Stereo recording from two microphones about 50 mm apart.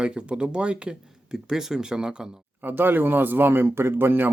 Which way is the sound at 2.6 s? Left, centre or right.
Right.